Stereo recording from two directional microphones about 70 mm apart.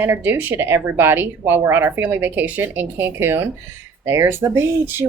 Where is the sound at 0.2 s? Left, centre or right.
Right.